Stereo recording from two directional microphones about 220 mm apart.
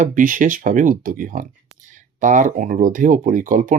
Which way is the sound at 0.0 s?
35° right (ahead or behind).